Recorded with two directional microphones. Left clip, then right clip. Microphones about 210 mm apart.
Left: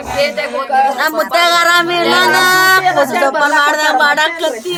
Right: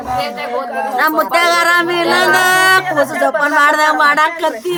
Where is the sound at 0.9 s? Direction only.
5° right (ahead or behind).